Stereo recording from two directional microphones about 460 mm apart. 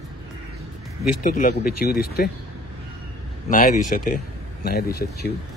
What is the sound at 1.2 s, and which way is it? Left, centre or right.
Speech, centre.